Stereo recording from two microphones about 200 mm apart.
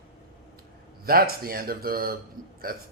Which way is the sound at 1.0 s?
50° right (ahead or behind).